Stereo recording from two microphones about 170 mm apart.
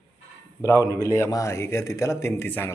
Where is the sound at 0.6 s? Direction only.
20° left (ahead or behind).